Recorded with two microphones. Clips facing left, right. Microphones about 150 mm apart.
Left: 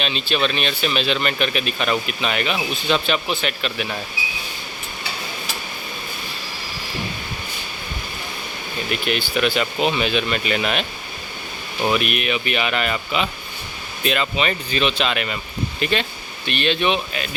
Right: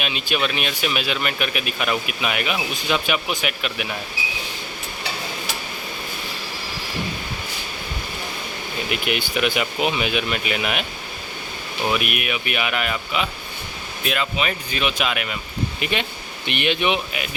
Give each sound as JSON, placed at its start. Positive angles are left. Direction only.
{"t": 0.0, "sound": "speech", "side_deg": -10}
{"t": 8.9, "sound": "speech", "side_deg": -15}
{"t": 11.8, "sound": "speech", "side_deg": 0}
{"t": 12.0, "sound": "speech", "side_deg": -10}